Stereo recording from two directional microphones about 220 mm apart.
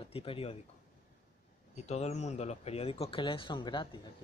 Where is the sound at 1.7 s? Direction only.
30° left (ahead or behind).